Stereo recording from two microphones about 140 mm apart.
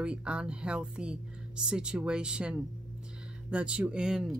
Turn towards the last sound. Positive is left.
turn(degrees=-5)  # may be behind; listen again after turning